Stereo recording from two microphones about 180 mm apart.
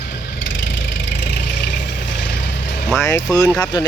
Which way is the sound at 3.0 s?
15° left (ahead or behind).